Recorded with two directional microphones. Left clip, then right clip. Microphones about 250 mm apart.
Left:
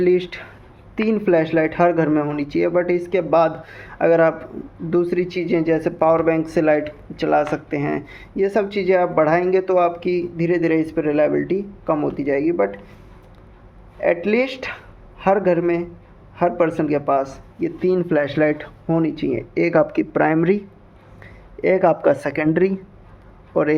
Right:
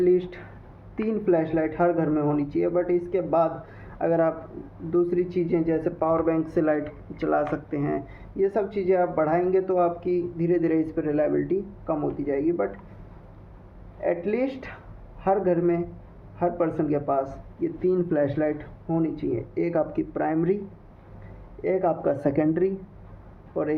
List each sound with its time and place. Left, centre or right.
0.0 s speech: left
14.0 s speech: left
21.6 s speech: left